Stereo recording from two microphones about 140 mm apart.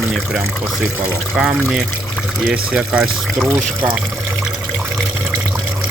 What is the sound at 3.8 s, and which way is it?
Water, 10° right (ahead or behind).